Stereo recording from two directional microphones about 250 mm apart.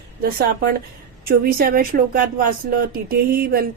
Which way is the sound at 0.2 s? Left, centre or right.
Right.